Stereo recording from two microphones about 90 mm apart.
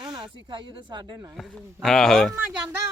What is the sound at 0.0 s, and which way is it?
Speech, 55° right (ahead or behind).